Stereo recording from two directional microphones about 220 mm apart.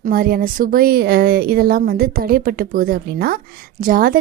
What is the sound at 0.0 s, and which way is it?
Speech, 40° right (ahead or behind).